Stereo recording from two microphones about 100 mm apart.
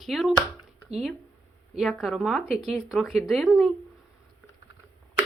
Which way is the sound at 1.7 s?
Centre (ahead or behind).